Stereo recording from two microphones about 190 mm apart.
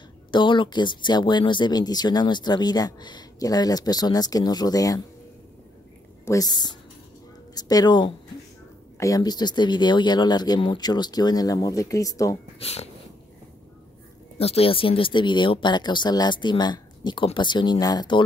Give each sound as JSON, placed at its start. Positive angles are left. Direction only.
{"t": 0.3, "sound": "speech", "side_deg": 25}
{"t": 6.2, "sound": "speech", "side_deg": 20}
{"t": 12.5, "sound": "speech", "side_deg": 35}
{"t": 14.4, "sound": "speech", "side_deg": 30}